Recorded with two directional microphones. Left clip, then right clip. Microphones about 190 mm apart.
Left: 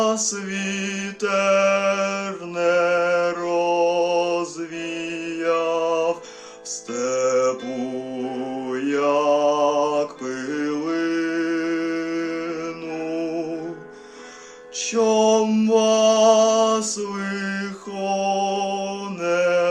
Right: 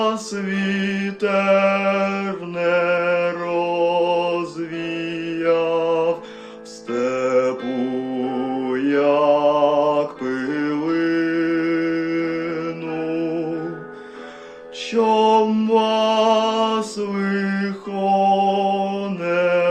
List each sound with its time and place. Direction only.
0.0 s music: 10° left (ahead or behind)
6.9 s mantra: 10° left (ahead or behind)
15.0 s mantra: 15° left (ahead or behind)